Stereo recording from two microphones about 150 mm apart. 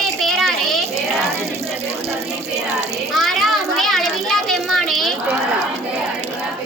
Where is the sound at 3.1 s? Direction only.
Centre (ahead or behind).